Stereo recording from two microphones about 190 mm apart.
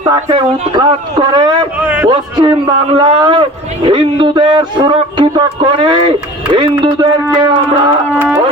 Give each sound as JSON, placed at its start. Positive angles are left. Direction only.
{"t": 0.1, "sound": "speech", "side_deg": -20}